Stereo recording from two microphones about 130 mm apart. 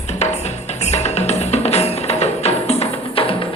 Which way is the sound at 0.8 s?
55° left (ahead or behind).